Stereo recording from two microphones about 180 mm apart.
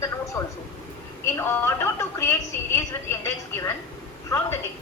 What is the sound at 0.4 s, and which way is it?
Speech, 15° left (ahead or behind).